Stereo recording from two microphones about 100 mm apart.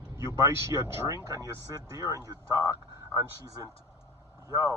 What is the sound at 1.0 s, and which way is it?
Speech, 35° right (ahead or behind).